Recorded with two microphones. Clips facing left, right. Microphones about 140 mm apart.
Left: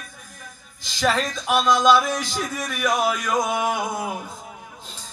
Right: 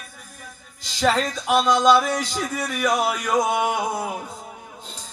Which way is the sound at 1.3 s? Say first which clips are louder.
Right 1 dB; 10° right (ahead or behind).